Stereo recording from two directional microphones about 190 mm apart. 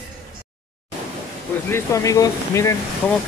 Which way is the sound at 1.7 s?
15° left (ahead or behind).